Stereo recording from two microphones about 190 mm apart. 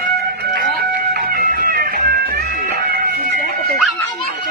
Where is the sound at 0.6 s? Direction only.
50° right (ahead or behind).